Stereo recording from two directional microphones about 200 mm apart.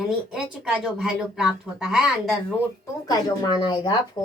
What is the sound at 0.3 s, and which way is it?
Speech, 5° right (ahead or behind).